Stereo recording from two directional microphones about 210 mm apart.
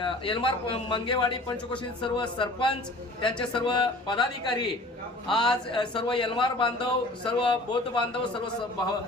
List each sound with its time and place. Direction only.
0.0 s a man's voice: 25° left (ahead or behind)